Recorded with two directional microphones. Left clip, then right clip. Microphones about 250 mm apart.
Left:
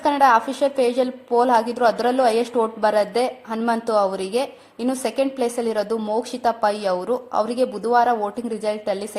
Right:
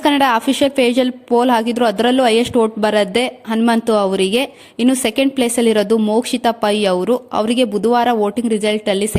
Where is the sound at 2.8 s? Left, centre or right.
Right.